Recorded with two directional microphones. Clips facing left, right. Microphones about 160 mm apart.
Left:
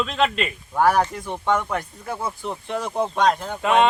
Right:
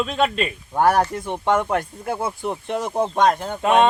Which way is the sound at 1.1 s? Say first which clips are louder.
Right 3 dB; 20° right (ahead or behind).